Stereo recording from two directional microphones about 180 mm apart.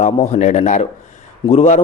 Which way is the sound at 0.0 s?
40° left (ahead or behind).